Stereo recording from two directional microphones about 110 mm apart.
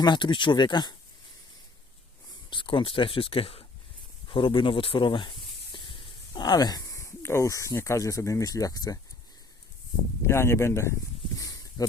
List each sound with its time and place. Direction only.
0.0 s speech: 45° left (ahead or behind)
2.5 s speech: 50° left (ahead or behind); by 9.0 s 35° left (ahead or behind)
10.2 s speech: 25° left (ahead or behind)
11.3 s a sound: 30° left (ahead or behind)